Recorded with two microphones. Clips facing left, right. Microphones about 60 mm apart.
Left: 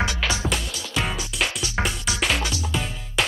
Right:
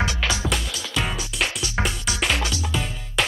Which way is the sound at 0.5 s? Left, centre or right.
Centre.